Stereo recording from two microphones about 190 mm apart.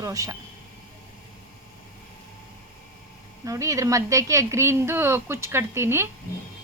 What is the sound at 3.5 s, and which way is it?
Speech, 15° right (ahead or behind).